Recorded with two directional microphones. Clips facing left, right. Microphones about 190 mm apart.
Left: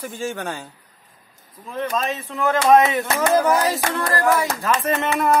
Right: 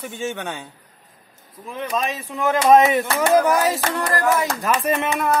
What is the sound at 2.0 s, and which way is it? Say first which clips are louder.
Speech: even; 15° right (ahead or behind).